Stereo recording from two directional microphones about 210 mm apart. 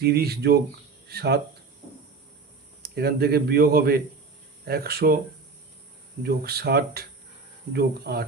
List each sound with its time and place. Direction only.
0.0 s speech: 50° right (ahead or behind)
2.8 s speech: 50° right (ahead or behind)
6.2 s speech: 45° right (ahead or behind)